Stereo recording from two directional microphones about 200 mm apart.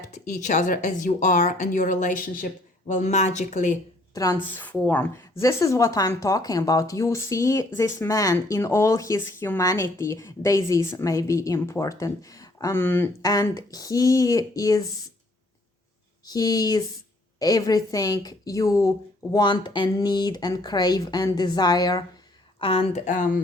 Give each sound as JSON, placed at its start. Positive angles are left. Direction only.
{"t": 0.1, "sound": "speech", "side_deg": 35}
{"t": 4.1, "sound": "speech", "side_deg": 15}
{"t": 16.2, "sound": "a woman's voice", "side_deg": 20}